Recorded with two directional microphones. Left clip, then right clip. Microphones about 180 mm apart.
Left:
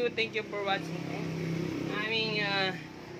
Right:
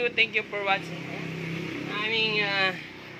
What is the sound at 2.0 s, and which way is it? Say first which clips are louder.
Speech: right 6 dB; 25° right (ahead or behind).